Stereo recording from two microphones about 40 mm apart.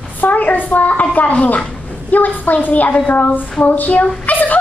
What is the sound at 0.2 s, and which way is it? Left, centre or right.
A woman's voice, left.